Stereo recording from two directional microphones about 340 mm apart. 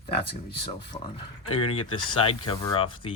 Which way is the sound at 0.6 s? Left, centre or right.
Centre.